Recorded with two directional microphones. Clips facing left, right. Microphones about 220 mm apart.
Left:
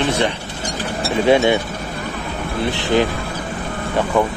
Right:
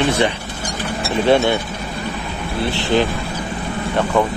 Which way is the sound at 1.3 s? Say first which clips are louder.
Left 1 dB; 15° left (ahead or behind).